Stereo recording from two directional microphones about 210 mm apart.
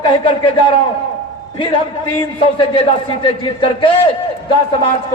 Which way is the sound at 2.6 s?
25° left (ahead or behind).